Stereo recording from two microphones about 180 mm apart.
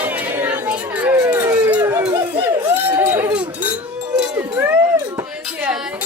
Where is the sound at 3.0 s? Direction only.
10° right (ahead or behind).